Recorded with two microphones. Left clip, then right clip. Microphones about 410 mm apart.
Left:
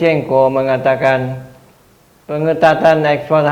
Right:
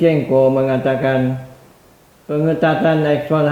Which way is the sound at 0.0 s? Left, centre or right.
Left.